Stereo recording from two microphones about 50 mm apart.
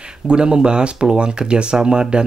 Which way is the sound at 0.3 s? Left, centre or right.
Centre.